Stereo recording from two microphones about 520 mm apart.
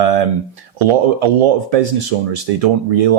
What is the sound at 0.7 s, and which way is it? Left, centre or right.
Speech, right.